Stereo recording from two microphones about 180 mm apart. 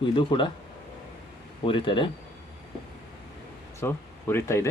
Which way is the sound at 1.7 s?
25° left (ahead or behind).